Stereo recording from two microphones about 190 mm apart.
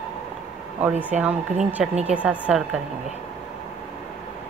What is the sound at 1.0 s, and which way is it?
A woman's voice, 10° right (ahead or behind).